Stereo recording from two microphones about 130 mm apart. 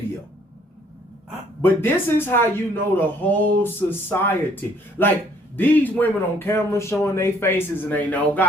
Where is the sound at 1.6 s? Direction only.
15° left (ahead or behind).